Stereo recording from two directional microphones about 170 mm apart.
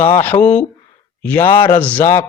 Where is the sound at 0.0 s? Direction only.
10° left (ahead or behind).